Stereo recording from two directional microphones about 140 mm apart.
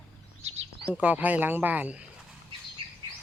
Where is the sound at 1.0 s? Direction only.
10° right (ahead or behind).